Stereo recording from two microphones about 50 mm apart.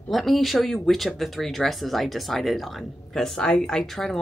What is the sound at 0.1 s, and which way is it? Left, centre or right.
Speech, centre.